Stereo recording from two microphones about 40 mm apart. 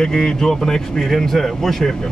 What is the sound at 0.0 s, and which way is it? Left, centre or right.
A man's voice, centre.